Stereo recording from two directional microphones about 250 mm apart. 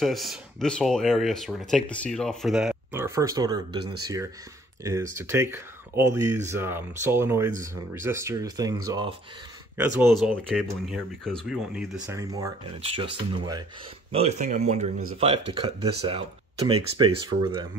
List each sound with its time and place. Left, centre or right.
0.0 s speech: centre
5.1 s speech: centre
9.8 s speech: centre
12.2 s speech: centre